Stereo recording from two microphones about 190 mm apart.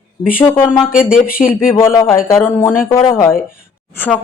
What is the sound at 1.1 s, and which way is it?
Speech, 50° left (ahead or behind).